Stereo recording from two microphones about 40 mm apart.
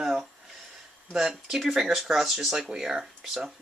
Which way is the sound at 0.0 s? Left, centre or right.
Centre.